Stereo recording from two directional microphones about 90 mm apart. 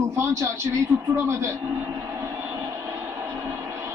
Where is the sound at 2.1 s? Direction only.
35° right (ahead or behind).